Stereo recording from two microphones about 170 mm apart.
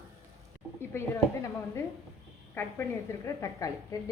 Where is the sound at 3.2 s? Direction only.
20° left (ahead or behind).